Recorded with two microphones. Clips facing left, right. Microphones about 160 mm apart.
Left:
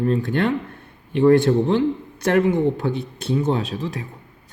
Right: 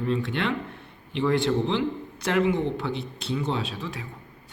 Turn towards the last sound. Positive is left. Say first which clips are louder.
# left 6 dB
turn(degrees=40)  # may be behind; listen again after turning